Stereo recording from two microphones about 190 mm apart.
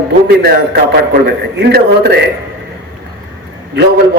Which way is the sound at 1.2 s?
55° right (ahead or behind).